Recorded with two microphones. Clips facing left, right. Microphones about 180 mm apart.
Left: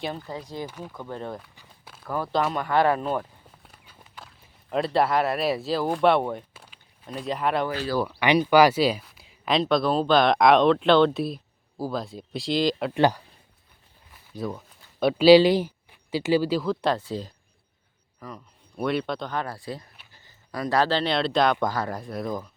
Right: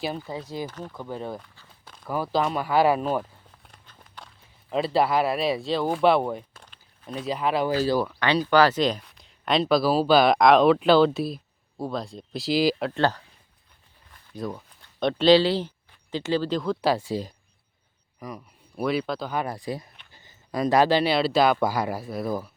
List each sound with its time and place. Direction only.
0.0 s speech: 5° right (ahead or behind)
0.7 s speech: 10° left (ahead or behind)
0.9 s speech: 5° right (ahead or behind)
1.5 s walk: 10° left (ahead or behind)
2.0 s speech: 10° right (ahead or behind)
3.7 s walk: 5° left (ahead or behind)
7.7 s speech: 30° right (ahead or behind)
8.2 s speech: 15° left (ahead or behind); by 12.9 s 5° right (ahead or behind)
12.9 s speech: 15° left (ahead or behind)
14.1 s speech: 5° left (ahead or behind)